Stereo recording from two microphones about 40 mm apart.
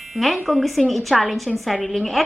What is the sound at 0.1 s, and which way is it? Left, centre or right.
A woman's voice, centre.